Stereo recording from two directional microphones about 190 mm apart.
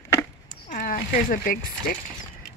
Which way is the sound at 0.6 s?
45° left (ahead or behind).